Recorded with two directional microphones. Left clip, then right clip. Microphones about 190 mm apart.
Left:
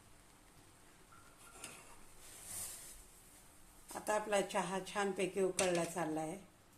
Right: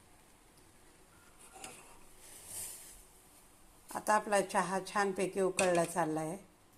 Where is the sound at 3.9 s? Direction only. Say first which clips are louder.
Right 5 dB; 20° right (ahead or behind).